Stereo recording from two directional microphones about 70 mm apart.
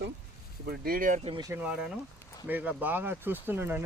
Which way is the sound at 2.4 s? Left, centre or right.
Right.